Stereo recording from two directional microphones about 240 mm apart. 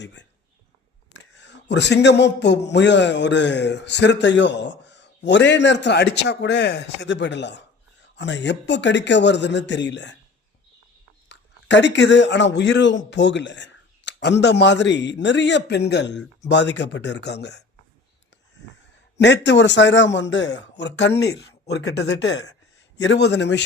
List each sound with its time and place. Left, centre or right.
0.0 s speech: left
1.1 s a sound: left
2.6 s speech: left
11.3 s speech: left
19.1 s speech: left